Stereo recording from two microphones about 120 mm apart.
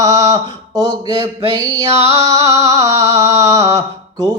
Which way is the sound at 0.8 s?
30° right (ahead or behind).